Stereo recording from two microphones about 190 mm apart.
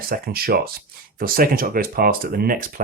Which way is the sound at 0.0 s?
50° right (ahead or behind).